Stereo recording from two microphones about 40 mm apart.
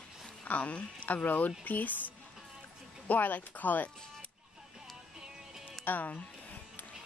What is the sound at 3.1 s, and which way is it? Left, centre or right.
Speech, left.